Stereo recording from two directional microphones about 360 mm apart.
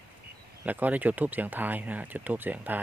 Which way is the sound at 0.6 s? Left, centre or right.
Centre.